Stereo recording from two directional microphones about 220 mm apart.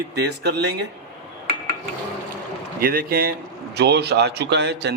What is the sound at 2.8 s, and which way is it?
A man's voice, 40° right (ahead or behind).